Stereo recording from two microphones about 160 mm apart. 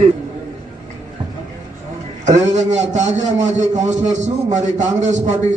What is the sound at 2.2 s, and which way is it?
A man's voice, 50° right (ahead or behind).